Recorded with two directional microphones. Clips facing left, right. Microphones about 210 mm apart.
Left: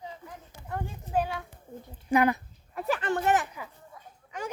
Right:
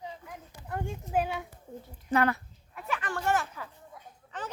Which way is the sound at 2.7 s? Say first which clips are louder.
Left 6 dB; 35° left (ahead or behind).